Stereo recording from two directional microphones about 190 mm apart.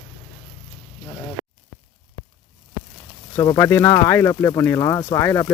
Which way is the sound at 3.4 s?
15° left (ahead or behind).